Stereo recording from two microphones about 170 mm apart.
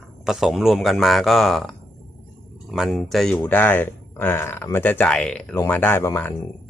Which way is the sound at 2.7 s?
Centre (ahead or behind).